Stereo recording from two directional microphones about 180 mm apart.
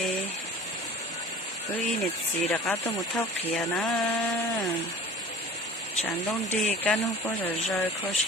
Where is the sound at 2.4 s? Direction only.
10° left (ahead or behind).